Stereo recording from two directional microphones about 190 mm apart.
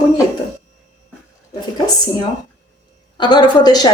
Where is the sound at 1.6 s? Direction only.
20° left (ahead or behind).